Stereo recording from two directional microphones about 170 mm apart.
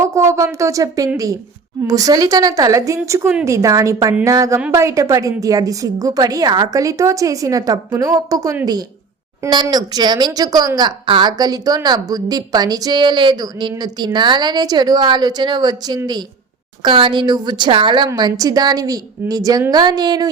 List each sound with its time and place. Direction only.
0.0 s speech: 15° right (ahead or behind)